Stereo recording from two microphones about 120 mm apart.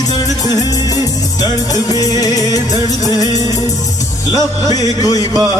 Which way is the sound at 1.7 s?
30° left (ahead or behind).